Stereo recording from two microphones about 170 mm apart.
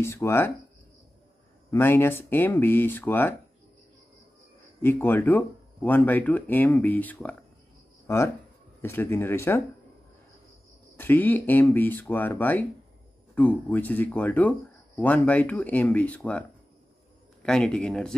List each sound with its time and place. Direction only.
0.0 s speech: 15° left (ahead or behind)
1.7 s speech: 15° left (ahead or behind)
4.8 s speech: 10° left (ahead or behind)
11.0 s a man's voice: 10° left (ahead or behind)